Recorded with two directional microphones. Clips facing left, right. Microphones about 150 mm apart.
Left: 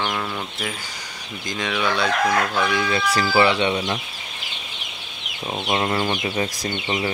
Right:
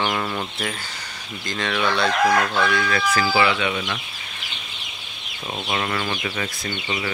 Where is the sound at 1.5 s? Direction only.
10° left (ahead or behind); by 4.0 s 30° left (ahead or behind).